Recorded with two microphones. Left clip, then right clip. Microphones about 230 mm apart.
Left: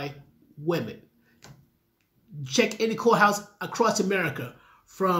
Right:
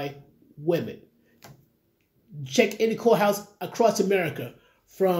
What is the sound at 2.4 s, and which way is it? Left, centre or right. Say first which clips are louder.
Speech: right 2 dB; centre.